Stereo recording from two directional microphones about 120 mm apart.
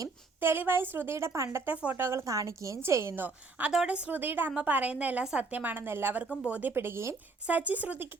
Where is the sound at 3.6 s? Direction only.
5° right (ahead or behind).